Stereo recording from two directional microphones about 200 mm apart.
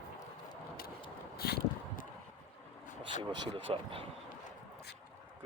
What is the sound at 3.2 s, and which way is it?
Speech, 25° right (ahead or behind).